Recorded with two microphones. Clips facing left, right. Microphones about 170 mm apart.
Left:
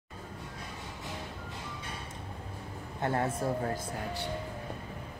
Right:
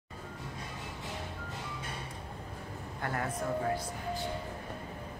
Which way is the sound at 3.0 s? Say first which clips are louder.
Left 5 dB; 25° left (ahead or behind).